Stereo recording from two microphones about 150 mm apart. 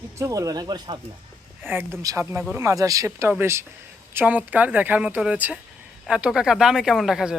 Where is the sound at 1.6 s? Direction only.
15° right (ahead or behind).